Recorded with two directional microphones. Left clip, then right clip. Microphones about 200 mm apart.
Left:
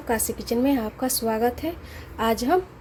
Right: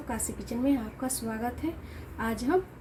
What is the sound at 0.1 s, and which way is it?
A woman's voice, 35° left (ahead or behind).